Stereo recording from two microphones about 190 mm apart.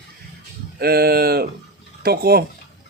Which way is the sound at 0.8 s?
55° right (ahead or behind).